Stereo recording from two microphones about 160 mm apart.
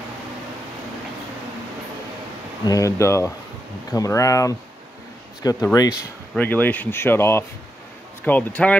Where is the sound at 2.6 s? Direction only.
20° left (ahead or behind).